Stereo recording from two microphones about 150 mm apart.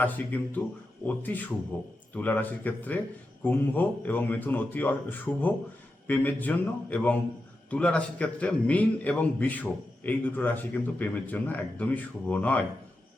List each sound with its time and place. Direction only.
0.0 s a man's voice: 10° left (ahead or behind)